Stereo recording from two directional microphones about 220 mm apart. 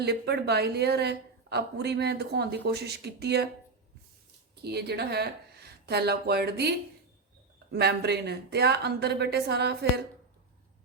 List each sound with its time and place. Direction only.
0.0 s a woman's voice: 50° right (ahead or behind)
4.6 s a woman's voice: 50° right (ahead or behind)